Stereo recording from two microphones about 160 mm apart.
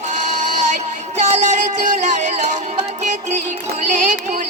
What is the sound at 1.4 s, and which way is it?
Music, 50° right (ahead or behind).